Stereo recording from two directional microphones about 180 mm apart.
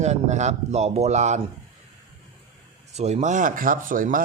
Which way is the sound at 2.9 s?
40° right (ahead or behind).